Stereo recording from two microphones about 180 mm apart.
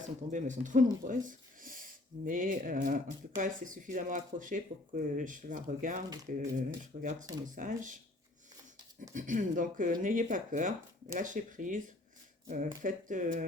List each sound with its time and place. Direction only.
0.3 s speech: 45° right (ahead or behind)
9.1 s speech: 45° right (ahead or behind)